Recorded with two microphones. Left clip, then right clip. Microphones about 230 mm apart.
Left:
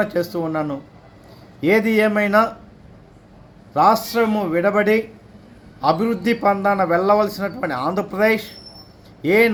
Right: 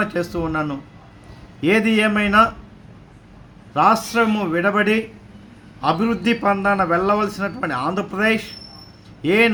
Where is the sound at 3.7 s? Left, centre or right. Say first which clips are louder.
Even; centre.